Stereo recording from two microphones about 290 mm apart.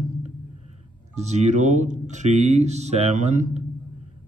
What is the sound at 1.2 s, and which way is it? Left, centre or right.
Speech, right.